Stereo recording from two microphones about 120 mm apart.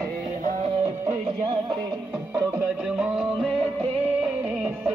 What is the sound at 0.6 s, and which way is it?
Music, 65° right (ahead or behind).